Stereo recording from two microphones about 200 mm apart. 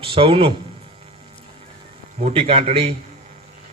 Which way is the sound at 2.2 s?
30° right (ahead or behind).